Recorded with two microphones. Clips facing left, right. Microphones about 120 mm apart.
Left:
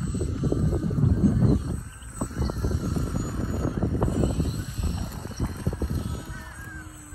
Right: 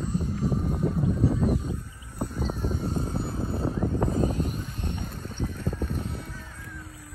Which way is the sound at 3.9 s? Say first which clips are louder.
Even; 15° left (ahead or behind).